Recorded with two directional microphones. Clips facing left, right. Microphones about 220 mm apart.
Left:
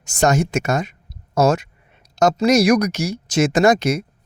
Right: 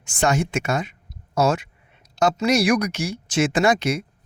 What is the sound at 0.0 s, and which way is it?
Speech, 40° left (ahead or behind).